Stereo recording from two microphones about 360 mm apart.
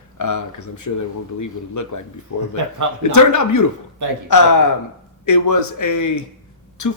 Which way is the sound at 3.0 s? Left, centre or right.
Left.